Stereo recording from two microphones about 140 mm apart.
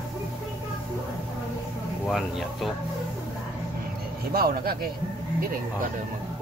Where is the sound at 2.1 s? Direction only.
Centre (ahead or behind).